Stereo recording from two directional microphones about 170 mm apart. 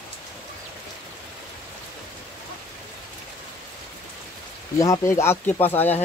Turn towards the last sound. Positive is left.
turn(degrees=10)  # may be behind; listen again after turning